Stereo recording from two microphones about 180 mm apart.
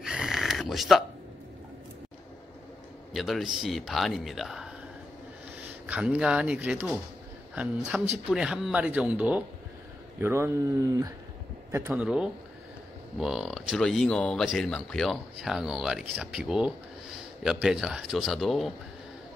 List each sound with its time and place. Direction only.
0.0 s a sound: 5° right (ahead or behind)
3.1 s speech: centre (ahead or behind)
5.9 s speech: 5° right (ahead or behind)